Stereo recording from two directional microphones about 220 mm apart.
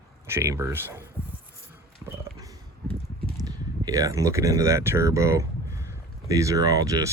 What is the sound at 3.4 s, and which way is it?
Speech, 15° right (ahead or behind).